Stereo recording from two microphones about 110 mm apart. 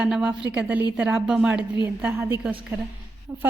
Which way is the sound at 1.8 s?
20° right (ahead or behind).